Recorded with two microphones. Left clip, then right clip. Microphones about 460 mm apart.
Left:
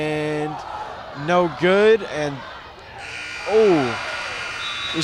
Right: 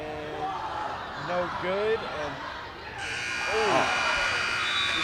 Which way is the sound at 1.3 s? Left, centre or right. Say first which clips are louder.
Left 12 dB; left.